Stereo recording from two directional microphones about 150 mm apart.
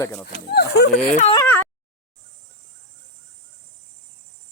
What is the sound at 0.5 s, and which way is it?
Speech, 90° left.